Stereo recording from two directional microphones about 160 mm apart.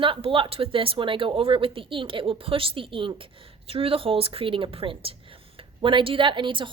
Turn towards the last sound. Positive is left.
turn(degrees=-30)  # may be behind; listen again after turning